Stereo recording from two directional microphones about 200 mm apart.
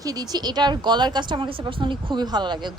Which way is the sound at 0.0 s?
20° right (ahead or behind).